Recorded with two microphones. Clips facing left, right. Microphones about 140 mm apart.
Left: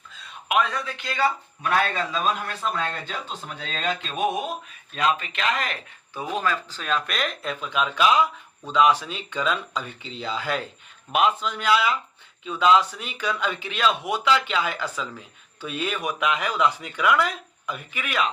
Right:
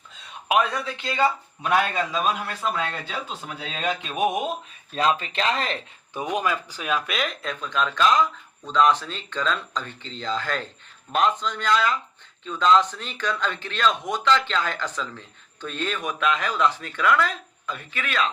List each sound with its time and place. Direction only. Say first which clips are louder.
0.4 s a man's voice: right 2 dB; 35° right (ahead or behind)
1.1 s a man's voice: right 1 dB; 20° right (ahead or behind)
4.9 s speech: right 1 dB; 35° right (ahead or behind); by 18.3 s 10° left (ahead or behind)